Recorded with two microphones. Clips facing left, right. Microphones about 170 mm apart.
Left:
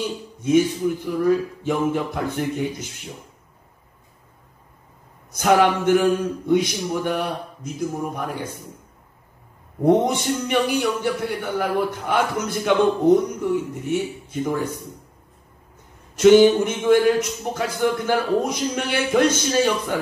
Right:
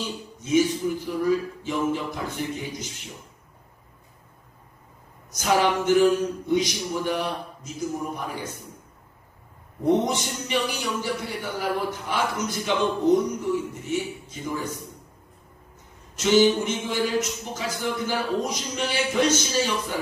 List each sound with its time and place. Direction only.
0.4 s a man's voice: 55° left (ahead or behind)
5.3 s a man's voice: 55° left (ahead or behind)
9.8 s a man's voice: 60° left (ahead or behind)
16.2 s a man's voice: 55° left (ahead or behind)